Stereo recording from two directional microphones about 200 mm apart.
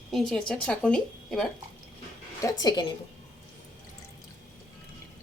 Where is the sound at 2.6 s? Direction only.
20° left (ahead or behind).